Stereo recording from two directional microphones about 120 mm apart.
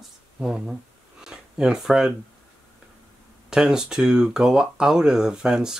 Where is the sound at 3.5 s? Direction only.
5° right (ahead or behind).